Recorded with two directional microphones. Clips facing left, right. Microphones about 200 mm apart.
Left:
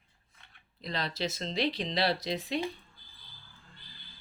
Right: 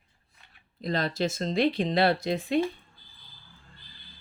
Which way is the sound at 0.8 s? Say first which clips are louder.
Right 7 dB; 50° right (ahead or behind).